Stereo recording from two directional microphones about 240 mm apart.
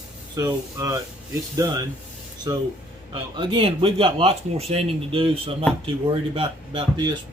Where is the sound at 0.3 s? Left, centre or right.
Centre.